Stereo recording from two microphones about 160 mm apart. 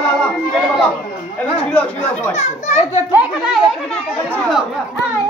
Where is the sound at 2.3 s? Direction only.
45° left (ahead or behind).